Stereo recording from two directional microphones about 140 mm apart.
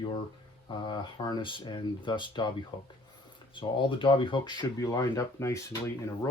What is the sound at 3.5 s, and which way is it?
Speech, 35° left (ahead or behind).